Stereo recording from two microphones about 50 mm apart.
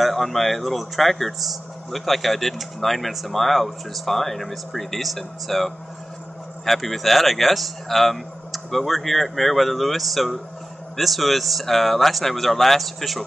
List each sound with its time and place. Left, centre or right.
0.0 s speech: centre